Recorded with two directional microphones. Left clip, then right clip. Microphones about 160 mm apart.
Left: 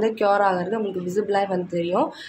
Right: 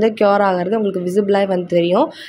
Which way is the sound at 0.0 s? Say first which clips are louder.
Right 5 dB; 35° right (ahead or behind).